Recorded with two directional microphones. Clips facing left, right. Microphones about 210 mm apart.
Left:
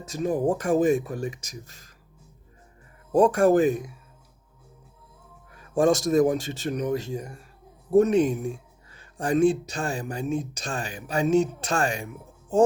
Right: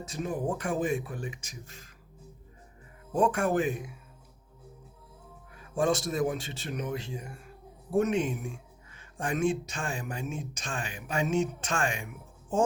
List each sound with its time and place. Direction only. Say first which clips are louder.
0.1 s speech: left 8 dB; 40° left (ahead or behind)
3.1 s speech: left 8 dB; 40° left (ahead or behind)
5.5 s speech: left 6 dB; 45° left (ahead or behind)